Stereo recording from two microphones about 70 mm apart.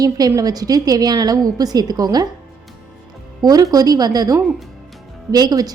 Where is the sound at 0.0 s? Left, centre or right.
Right.